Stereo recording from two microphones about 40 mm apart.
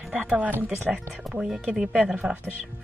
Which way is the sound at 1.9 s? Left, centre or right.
Centre.